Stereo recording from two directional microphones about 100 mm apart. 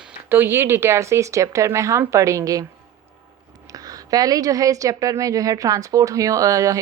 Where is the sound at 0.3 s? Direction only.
25° right (ahead or behind).